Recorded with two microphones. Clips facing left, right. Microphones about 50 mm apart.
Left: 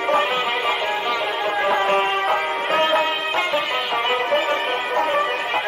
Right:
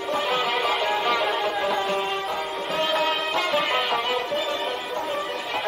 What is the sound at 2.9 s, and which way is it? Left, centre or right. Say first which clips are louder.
Music: left 3 dB; left.